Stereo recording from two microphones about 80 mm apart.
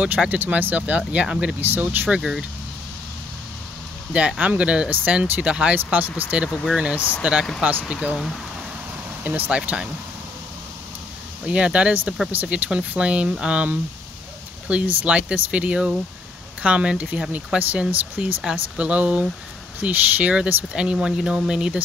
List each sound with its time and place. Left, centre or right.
0.0 s speech: centre
1.6 s speech: right
2.0 s speech: centre
4.4 s speech: centre
9.2 s speech: right
11.4 s speech: centre